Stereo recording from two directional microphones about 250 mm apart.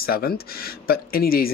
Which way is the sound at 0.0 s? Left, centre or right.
Left.